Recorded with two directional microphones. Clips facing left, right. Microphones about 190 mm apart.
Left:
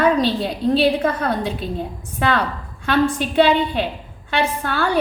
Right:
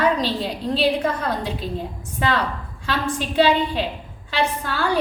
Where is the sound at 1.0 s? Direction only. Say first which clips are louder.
Left 3 dB; 55° left (ahead or behind).